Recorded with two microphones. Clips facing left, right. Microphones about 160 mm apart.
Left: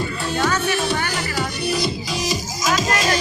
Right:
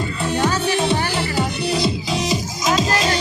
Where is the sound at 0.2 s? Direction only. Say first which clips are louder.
Right 3 dB; 20° right (ahead or behind).